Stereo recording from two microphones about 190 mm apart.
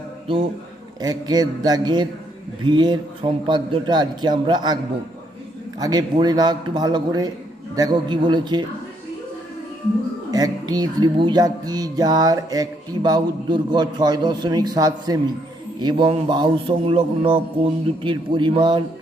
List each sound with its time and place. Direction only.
1.0 s speech: 20° right (ahead or behind)
5.8 s speech: 20° right (ahead or behind)
10.3 s speech: 20° right (ahead or behind)